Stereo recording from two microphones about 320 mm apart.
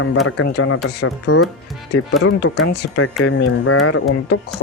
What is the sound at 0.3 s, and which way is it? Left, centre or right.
Speech, left.